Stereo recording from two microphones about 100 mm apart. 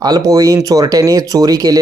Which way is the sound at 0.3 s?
35° right (ahead or behind).